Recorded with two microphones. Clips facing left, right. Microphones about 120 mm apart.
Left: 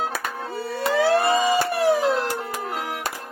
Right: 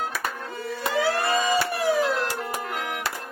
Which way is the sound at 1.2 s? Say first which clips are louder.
Left 4 dB; 25° left (ahead or behind).